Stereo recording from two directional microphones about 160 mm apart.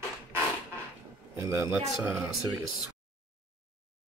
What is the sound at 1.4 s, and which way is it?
A man's voice, 20° right (ahead or behind).